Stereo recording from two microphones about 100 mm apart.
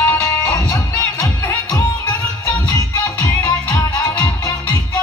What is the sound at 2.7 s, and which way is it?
Music, 40° left (ahead or behind).